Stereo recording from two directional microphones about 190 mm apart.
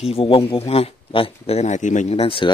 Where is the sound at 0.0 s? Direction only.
30° left (ahead or behind).